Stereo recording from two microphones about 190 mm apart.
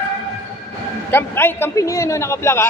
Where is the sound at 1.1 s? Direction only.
10° left (ahead or behind).